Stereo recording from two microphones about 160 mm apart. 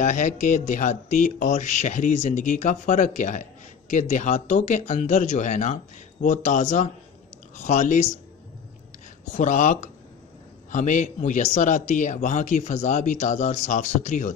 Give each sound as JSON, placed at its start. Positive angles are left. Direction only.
{"t": 0.0, "sound": "speech", "side_deg": 50}
{"t": 9.3, "sound": "speech", "side_deg": 50}